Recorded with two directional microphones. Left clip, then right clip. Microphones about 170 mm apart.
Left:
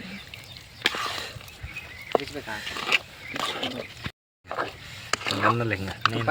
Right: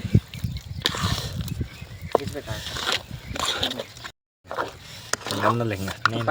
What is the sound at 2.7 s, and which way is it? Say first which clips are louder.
Wild animals: left 1 dB; 20° right (ahead or behind).